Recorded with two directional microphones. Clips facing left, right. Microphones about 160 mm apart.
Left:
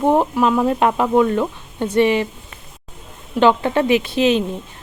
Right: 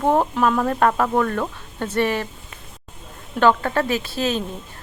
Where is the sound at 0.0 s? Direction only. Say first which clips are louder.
Left 3 dB; 15° left (ahead or behind).